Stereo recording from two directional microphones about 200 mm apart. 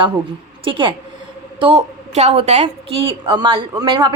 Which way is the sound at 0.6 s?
25° right (ahead or behind).